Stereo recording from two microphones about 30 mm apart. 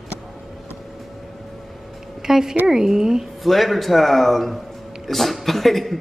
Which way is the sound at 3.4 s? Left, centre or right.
Centre.